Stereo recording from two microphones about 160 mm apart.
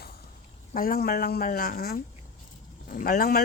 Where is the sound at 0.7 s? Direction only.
65° left (ahead or behind).